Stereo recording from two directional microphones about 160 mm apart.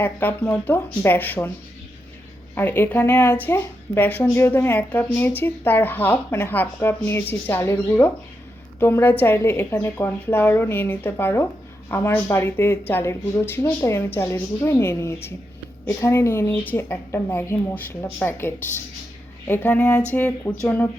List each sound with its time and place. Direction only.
0.0 s speech: 10° left (ahead or behind)
2.6 s speech: 15° left (ahead or behind)